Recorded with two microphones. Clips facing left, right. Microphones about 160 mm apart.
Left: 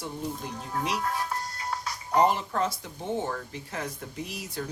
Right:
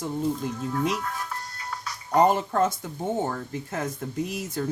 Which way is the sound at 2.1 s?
45° right (ahead or behind).